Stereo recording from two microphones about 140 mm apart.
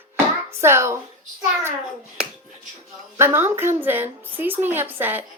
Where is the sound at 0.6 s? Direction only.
20° right (ahead or behind).